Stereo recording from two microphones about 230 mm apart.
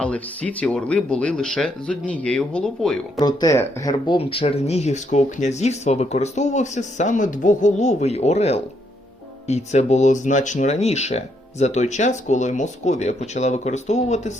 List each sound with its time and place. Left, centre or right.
0.0 s speech: centre
3.2 s speech: centre